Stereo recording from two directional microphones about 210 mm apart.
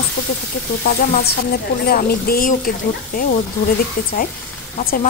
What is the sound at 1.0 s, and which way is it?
Speech, 45° left (ahead or behind).